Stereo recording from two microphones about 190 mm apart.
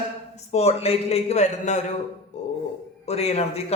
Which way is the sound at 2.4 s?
35° left (ahead or behind).